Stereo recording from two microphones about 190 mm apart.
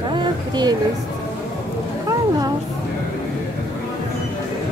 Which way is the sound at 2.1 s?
20° right (ahead or behind).